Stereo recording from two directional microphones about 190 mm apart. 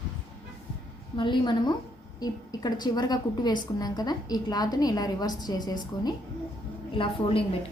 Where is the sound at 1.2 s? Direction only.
25° left (ahead or behind).